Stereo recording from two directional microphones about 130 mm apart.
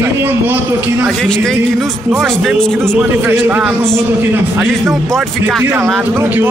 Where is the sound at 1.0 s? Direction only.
5° left (ahead or behind).